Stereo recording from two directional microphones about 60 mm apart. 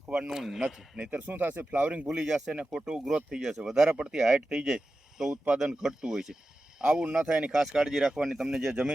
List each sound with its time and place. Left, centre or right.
0.1 s speech: centre
0.6 s speech: centre
1.3 s speech: right
2.0 s speech: centre